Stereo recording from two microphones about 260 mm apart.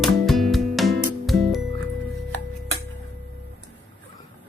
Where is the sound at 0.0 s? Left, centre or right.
Centre.